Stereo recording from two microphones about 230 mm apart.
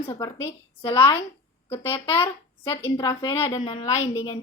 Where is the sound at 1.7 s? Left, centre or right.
Centre.